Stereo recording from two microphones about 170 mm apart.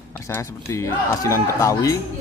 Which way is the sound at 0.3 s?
15° left (ahead or behind).